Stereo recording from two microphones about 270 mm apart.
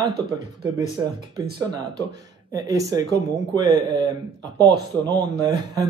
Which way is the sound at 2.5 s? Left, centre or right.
Centre.